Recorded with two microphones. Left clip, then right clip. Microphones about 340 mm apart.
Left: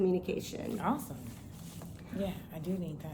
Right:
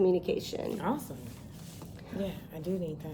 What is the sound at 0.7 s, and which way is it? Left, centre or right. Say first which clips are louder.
Speech: left 4 dB; centre.